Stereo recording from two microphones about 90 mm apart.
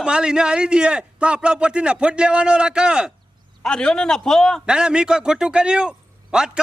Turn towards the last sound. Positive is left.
turn(degrees=-10)  # may be behind; listen again after turning